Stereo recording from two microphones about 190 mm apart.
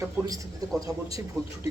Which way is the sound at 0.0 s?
15° right (ahead or behind).